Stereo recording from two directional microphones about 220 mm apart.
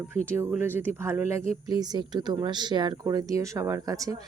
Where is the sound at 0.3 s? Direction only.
10° right (ahead or behind).